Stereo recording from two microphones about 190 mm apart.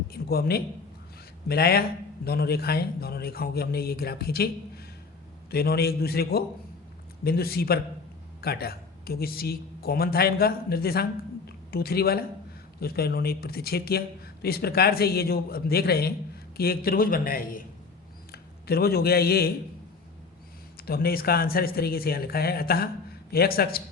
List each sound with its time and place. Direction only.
0.1 s speech: 55° left (ahead or behind)
5.5 s speech: 55° left (ahead or behind)
11.4 s a sound: 55° left (ahead or behind)
12.8 s a man's voice: 55° left (ahead or behind)
20.7 s speech: 55° left (ahead or behind)